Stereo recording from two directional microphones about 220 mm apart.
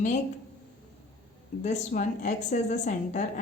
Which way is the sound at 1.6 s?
35° left (ahead or behind).